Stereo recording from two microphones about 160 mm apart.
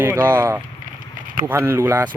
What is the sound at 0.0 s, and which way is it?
Speech, 15° right (ahead or behind).